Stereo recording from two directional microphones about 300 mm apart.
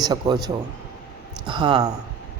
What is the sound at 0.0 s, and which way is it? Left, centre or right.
Speech, centre.